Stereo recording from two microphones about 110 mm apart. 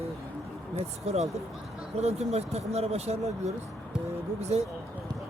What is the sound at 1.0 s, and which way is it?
Speech, 80° right.